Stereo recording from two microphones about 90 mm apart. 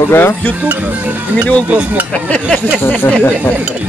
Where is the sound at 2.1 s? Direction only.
15° left (ahead or behind).